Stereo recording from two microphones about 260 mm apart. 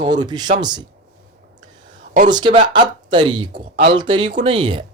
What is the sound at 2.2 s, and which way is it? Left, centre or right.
Speech, centre.